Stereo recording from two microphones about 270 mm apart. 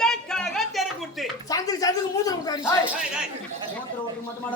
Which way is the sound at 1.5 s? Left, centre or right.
Centre.